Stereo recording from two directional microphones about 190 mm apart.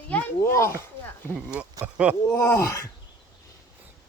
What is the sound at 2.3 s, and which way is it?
Speech, 15° left (ahead or behind).